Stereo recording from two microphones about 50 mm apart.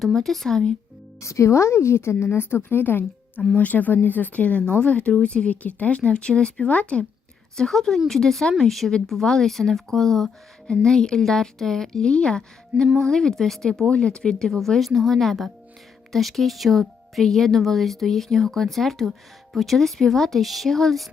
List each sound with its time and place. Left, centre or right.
0.0 s speech: centre
1.2 s a woman's voice: left
7.5 s speech: centre
13.7 s speech: centre